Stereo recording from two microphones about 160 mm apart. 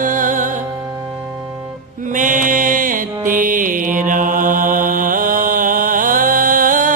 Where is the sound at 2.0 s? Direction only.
55° right (ahead or behind).